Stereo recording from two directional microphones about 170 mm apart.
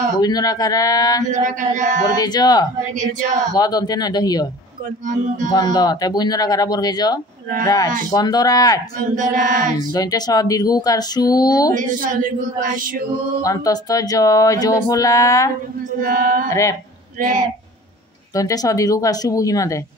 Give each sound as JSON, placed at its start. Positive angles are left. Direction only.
{"t": 0.2, "sound": "speech", "side_deg": 20}
{"t": 1.3, "sound": "speech", "side_deg": -50}
{"t": 2.2, "sound": "speech", "side_deg": 25}
{"t": 3.0, "sound": "speech", "side_deg": -50}
{"t": 3.5, "sound": "speech", "side_deg": 25}
{"t": 5.0, "sound": "speech", "side_deg": -50}
{"t": 5.5, "sound": "speech", "side_deg": 25}
{"t": 8.9, "sound": "speech", "side_deg": -50}
{"t": 9.9, "sound": "speech", "side_deg": 25}
{"t": 11.7, "sound": "speech", "side_deg": -50}
{"t": 13.4, "sound": "speech", "side_deg": 20}
{"t": 16.0, "sound": "female singing", "side_deg": -55}
{"t": 16.4, "sound": "speech", "side_deg": 20}
{"t": 18.3, "sound": "speech", "side_deg": 20}